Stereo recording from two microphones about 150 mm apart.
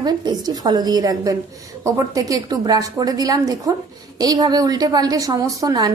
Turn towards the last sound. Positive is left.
turn(degrees=-25)  # may be behind; listen again after turning